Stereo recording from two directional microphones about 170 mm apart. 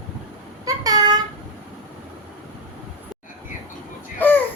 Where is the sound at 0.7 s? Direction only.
20° right (ahead or behind).